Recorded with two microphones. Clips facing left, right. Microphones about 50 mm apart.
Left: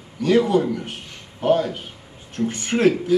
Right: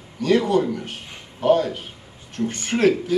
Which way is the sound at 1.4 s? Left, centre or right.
Centre.